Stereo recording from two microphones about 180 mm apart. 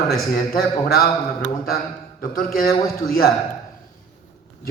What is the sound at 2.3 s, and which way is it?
Speech, 55° left (ahead or behind).